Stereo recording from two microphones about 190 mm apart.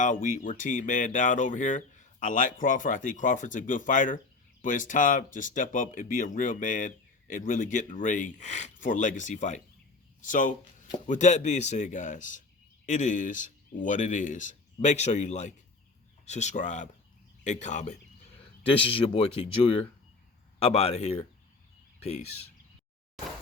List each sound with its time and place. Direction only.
0.0 s speech: 45° left (ahead or behind)